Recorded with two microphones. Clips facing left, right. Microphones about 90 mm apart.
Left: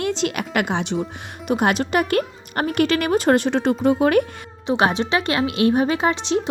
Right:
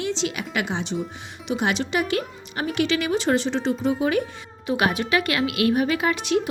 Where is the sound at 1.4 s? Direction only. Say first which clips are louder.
Left 5 dB; 50° left (ahead or behind).